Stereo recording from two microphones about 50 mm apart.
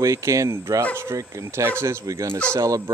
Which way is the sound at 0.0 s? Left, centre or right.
Right.